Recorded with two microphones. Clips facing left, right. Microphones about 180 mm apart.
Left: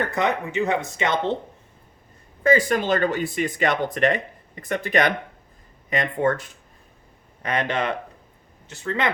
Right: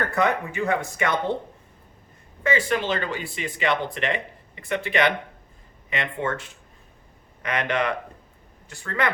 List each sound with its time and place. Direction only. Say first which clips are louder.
0.1 s speech: even; 20° left (ahead or behind)
2.4 s speech: left 4 dB; 40° left (ahead or behind); by 9.1 s 20° left (ahead or behind)